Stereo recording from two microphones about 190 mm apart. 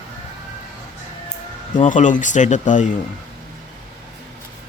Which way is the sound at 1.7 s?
40° left (ahead or behind).